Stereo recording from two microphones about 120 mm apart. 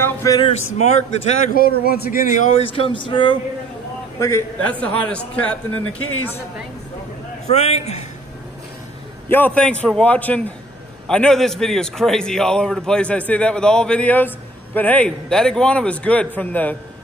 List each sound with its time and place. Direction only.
0.0 s a sound: 25° left (ahead or behind)
0.5 s speech: 70° left (ahead or behind)
2.2 s speech: 90° left
2.6 s speech: 50° left (ahead or behind)
4.6 s a man's voice: 10° left (ahead or behind)
7.4 s speech: 65° left (ahead or behind)
9.3 s a man's voice: 10° left (ahead or behind)